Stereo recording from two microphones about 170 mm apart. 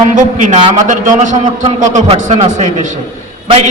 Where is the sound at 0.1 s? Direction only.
50° right (ahead or behind).